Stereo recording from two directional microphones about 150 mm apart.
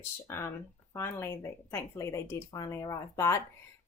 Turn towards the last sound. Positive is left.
turn(degrees=20)  # may be behind; listen again after turning